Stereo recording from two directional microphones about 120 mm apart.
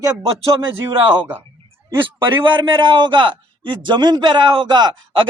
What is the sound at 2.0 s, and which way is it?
A man's voice, 45° right (ahead or behind).